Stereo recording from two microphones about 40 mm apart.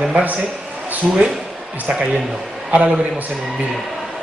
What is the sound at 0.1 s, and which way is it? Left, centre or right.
Speech, right.